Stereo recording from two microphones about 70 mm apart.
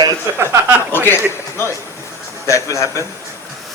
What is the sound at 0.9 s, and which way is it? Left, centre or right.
Speech, left.